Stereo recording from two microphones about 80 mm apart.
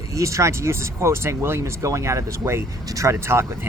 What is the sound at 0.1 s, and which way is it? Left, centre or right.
Speech, right.